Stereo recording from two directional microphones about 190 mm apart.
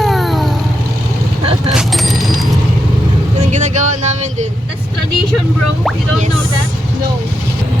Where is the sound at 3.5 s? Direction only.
40° right (ahead or behind).